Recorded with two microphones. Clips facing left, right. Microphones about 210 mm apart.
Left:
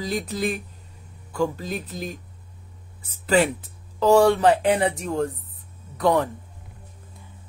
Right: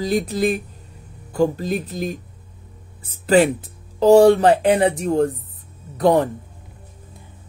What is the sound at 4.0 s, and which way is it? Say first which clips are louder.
Speech: right 5 dB; 35° right (ahead or behind).